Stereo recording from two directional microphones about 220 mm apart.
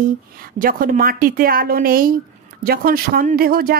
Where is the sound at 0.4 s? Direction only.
40° right (ahead or behind).